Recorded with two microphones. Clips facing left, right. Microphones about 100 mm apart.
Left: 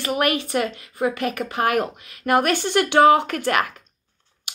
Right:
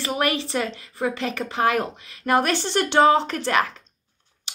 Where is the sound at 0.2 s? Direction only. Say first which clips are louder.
Left 2 dB; 55° left (ahead or behind).